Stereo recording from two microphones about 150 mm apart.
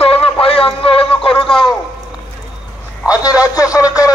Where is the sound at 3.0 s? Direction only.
25° left (ahead or behind).